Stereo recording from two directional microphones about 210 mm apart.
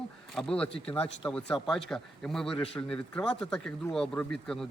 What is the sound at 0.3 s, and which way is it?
Speech, 5° left (ahead or behind).